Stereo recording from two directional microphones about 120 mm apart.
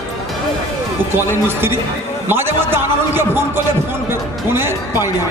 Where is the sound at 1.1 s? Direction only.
20° right (ahead or behind).